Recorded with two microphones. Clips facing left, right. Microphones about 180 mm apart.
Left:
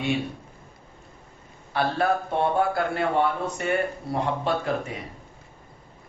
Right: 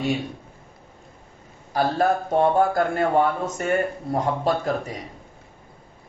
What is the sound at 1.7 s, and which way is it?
A man's voice, 40° right (ahead or behind).